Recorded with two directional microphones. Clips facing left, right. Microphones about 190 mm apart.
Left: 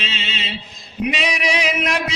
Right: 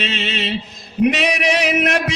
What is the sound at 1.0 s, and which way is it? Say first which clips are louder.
Music: right 5 dB; 60° right (ahead or behind).